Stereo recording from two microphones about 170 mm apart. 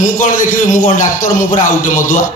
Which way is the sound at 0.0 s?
50° left (ahead or behind).